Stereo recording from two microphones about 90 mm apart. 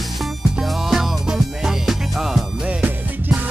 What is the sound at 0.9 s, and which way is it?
Music, 5° right (ahead or behind).